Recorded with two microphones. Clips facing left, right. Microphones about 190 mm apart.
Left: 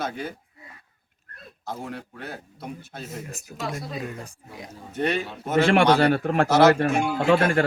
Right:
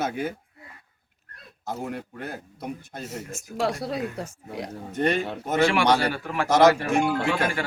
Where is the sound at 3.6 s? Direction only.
70° right (ahead or behind).